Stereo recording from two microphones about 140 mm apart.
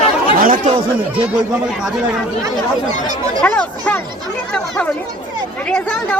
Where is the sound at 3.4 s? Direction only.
10° left (ahead or behind).